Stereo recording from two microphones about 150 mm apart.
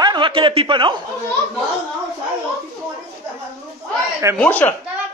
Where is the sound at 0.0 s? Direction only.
30° right (ahead or behind).